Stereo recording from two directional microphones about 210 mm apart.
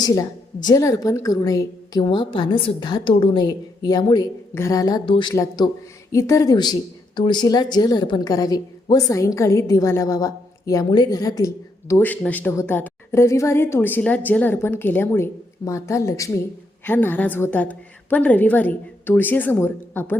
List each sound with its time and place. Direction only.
0.0 s a woman's voice: 15° left (ahead or behind)